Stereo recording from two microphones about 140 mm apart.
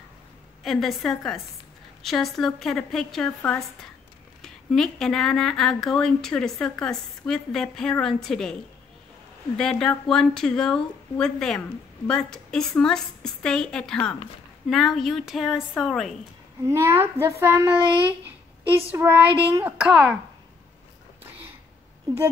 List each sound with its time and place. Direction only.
0.7 s speech: centre (ahead or behind)
9.6 s speech: 5° left (ahead or behind)
16.6 s a child's voice: 15° right (ahead or behind)